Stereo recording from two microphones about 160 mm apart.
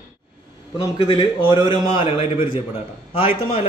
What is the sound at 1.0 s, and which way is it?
A man's voice, 35° left (ahead or behind).